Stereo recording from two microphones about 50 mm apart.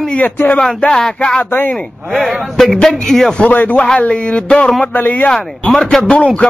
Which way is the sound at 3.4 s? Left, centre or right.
Left.